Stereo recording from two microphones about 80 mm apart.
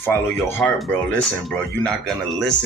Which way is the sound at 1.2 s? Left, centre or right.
Centre.